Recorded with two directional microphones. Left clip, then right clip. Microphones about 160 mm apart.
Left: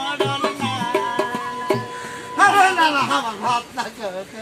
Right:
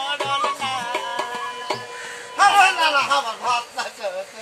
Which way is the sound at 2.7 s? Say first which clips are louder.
Left 1 dB; 20° right (ahead or behind).